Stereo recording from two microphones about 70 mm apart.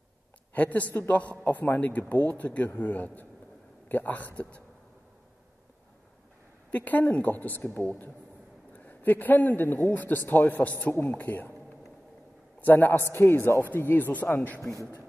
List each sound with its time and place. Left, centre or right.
0.6 s a man's voice: left
6.7 s a man's voice: left
12.5 s a man's voice: left